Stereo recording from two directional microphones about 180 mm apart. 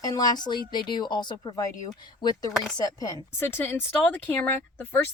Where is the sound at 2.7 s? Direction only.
20° left (ahead or behind).